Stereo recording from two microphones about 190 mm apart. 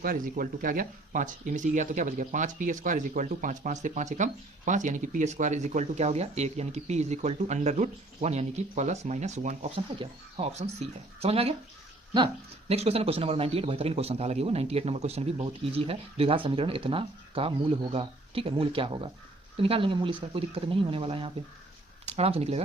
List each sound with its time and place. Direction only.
0.0 s speech: 45° right (ahead or behind)